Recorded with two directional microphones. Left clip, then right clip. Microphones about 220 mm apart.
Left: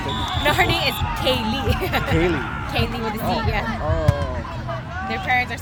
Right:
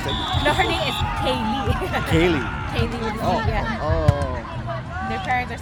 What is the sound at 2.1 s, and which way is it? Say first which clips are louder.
Speech: right 4 dB; 40° right (ahead or behind).